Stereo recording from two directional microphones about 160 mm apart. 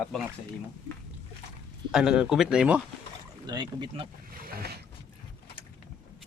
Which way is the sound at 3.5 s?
30° right (ahead or behind).